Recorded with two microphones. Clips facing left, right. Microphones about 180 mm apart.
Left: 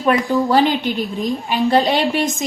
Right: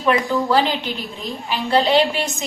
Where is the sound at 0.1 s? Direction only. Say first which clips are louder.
Left 2 dB; 50° left (ahead or behind).